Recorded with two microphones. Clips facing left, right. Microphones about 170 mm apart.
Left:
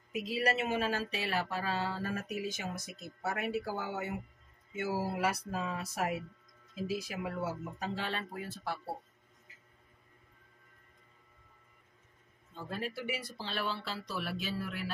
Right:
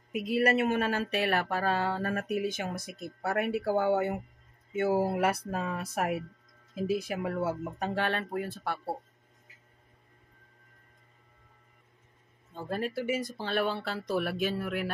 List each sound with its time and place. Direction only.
0.1 s speech: 55° right (ahead or behind)
12.5 s speech: 45° right (ahead or behind)